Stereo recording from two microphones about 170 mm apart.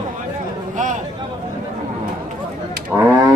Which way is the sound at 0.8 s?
45° right (ahead or behind).